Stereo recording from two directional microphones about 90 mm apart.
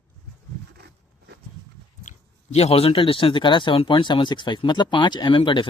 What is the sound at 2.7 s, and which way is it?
Speech, 90° left.